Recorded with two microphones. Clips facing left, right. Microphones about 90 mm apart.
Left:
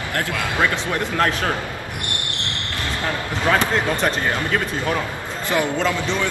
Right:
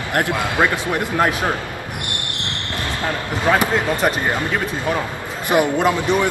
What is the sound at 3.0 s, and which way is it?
Speech, 15° right (ahead or behind).